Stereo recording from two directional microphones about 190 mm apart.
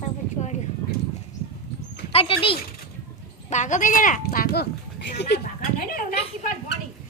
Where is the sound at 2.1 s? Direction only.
30° left (ahead or behind).